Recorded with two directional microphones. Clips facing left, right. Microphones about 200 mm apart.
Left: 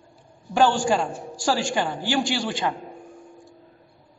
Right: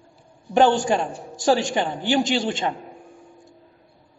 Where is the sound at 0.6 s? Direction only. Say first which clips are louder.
Right 2 dB; 20° right (ahead or behind).